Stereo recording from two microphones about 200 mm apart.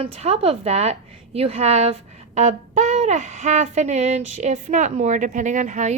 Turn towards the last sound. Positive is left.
turn(degrees=-35)  # may be behind; listen again after turning